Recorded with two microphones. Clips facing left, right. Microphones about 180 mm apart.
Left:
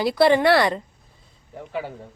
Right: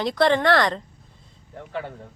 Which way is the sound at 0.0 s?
5° left (ahead or behind).